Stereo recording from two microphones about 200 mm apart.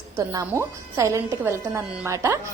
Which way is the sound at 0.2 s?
15° right (ahead or behind).